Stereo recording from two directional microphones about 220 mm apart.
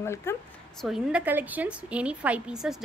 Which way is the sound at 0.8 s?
5° right (ahead or behind).